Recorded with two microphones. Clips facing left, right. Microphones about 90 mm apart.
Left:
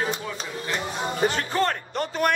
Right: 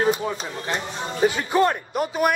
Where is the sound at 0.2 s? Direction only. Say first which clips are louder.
Right 4 dB; 30° right (ahead or behind).